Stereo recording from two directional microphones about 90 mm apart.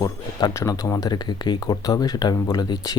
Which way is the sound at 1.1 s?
50° left (ahead or behind).